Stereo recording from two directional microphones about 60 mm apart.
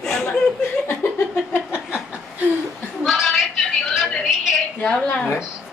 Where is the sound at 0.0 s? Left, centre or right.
Centre.